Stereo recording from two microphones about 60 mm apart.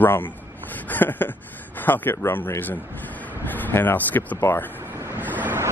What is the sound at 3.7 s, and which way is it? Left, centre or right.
Speech, left.